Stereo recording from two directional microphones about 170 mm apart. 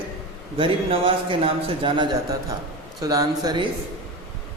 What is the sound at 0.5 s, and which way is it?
A man's voice, 30° right (ahead or behind).